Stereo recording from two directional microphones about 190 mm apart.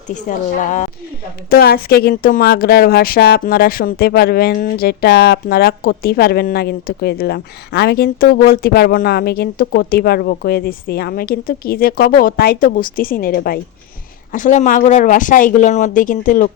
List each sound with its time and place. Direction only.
0.1 s speech: 40° left (ahead or behind)
1.5 s speech: 55° left (ahead or behind)